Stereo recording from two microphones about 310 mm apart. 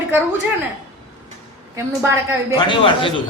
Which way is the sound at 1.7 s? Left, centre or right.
Centre.